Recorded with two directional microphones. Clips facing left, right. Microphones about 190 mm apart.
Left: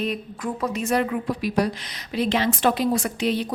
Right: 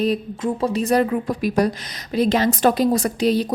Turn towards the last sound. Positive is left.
turn(degrees=-40)  # may be behind; listen again after turning